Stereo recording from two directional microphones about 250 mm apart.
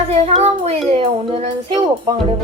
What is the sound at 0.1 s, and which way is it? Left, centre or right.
Child singing, right.